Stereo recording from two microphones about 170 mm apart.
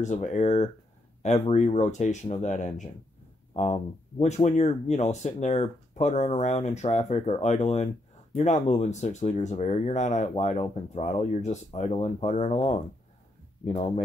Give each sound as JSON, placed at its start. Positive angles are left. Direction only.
{"t": 0.0, "sound": "speech", "side_deg": 45}
{"t": 4.2, "sound": "speech", "side_deg": 40}